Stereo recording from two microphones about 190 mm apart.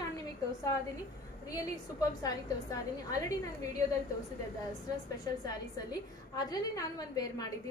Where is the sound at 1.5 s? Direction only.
20° left (ahead or behind).